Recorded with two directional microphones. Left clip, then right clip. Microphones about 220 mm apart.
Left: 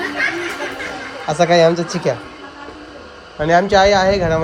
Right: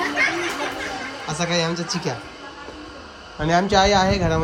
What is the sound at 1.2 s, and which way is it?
Speech, 10° right (ahead or behind).